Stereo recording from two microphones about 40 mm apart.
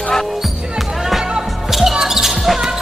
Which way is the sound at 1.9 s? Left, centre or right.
Centre.